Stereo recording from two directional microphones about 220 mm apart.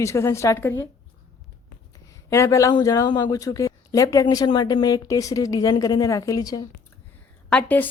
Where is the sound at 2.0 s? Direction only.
15° left (ahead or behind).